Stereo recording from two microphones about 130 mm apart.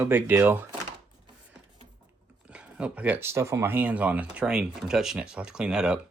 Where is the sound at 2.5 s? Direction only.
10° right (ahead or behind).